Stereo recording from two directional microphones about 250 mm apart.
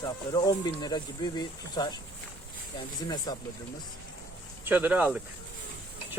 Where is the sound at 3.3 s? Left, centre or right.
Centre.